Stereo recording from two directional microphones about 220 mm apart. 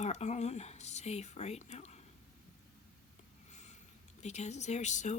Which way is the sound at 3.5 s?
30° left (ahead or behind).